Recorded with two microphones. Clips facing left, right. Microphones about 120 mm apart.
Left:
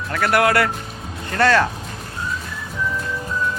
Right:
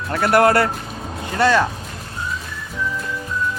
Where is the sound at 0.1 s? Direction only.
30° right (ahead or behind).